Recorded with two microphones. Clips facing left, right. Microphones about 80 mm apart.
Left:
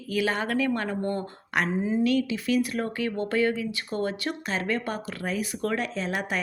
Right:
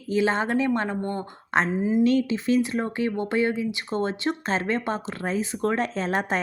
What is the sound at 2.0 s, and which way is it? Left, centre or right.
Speech, right.